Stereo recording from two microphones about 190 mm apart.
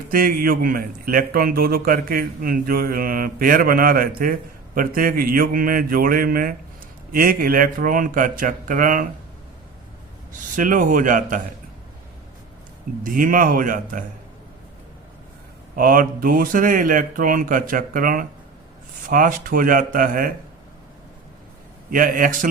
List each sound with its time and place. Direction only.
0.1 s a man's voice: 50° right (ahead or behind)
10.3 s a man's voice: 45° right (ahead or behind)
13.0 s a man's voice: 45° right (ahead or behind)
15.7 s a man's voice: 50° right (ahead or behind)
21.8 s a man's voice: 45° right (ahead or behind)